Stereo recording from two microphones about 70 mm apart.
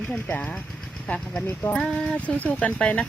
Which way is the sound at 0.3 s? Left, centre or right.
Left.